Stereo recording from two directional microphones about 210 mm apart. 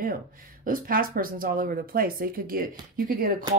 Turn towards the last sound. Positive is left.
turn(degrees=-45)  # may be behind; listen again after turning